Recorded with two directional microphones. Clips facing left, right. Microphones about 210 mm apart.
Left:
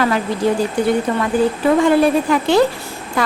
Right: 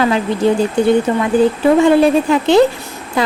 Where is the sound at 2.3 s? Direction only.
25° right (ahead or behind).